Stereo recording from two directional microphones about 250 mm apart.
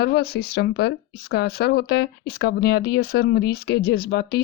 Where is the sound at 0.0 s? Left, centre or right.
Left.